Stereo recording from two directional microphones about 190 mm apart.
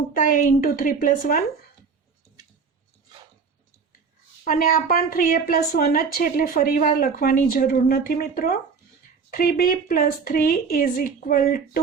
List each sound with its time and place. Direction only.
0.1 s a woman's voice: 45° left (ahead or behind)
4.4 s a woman's voice: 50° left (ahead or behind)